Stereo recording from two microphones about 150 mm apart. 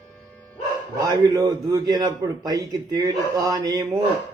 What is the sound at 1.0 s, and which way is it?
A man's voice, 25° right (ahead or behind).